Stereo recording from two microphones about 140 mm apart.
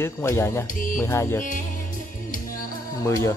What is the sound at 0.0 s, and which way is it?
Speech, 20° left (ahead or behind).